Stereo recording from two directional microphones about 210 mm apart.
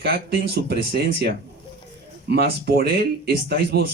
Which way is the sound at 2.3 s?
50° right (ahead or behind).